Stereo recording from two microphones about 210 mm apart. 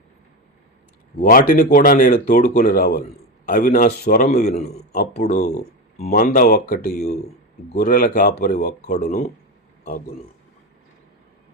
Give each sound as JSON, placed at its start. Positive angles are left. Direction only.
{"t": 1.2, "sound": "speech", "side_deg": 40}
{"t": 4.5, "sound": "speech", "side_deg": 35}
{"t": 6.1, "sound": "speech", "side_deg": 45}